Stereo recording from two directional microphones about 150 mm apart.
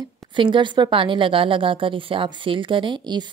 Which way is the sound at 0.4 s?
35° right (ahead or behind).